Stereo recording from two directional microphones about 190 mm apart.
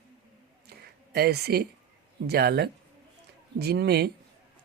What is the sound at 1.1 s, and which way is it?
A woman's voice, 55° right (ahead or behind).